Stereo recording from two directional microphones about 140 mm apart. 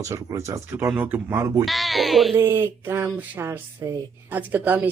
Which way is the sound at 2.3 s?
20° right (ahead or behind).